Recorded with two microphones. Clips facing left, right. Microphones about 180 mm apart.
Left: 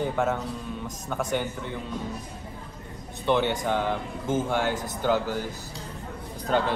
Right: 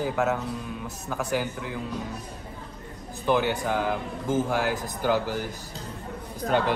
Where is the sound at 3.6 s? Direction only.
10° right (ahead or behind).